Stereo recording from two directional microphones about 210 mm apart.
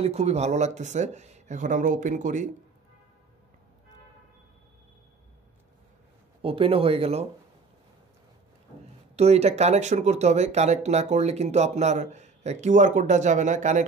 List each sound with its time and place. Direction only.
0.0 s speech: 30° right (ahead or behind)
6.4 s speech: 25° right (ahead or behind)
9.1 s speech: 30° right (ahead or behind)